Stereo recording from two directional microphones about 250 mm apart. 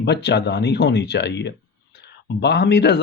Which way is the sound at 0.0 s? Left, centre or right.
Left.